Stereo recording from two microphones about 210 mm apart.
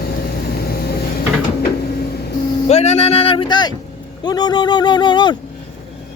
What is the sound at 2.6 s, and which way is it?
Speech, 30° left (ahead or behind).